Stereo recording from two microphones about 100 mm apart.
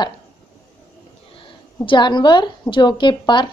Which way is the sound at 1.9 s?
50° left (ahead or behind).